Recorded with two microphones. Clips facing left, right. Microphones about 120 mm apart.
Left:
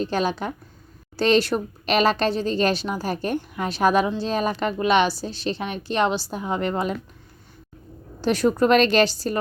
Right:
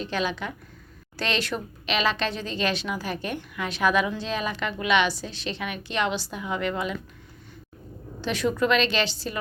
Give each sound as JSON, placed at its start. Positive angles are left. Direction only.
{"t": 0.0, "sound": "speech", "side_deg": 40}
{"t": 8.2, "sound": "a woman's voice", "side_deg": 40}